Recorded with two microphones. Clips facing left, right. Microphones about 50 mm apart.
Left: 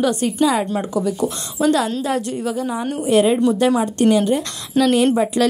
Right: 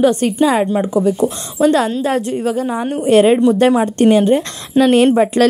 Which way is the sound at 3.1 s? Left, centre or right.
Right.